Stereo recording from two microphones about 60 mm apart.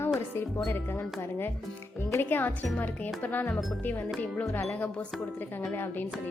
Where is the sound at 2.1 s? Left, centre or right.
Left.